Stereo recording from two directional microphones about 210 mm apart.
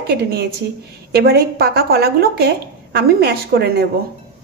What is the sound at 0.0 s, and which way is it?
Speech, 50° right (ahead or behind).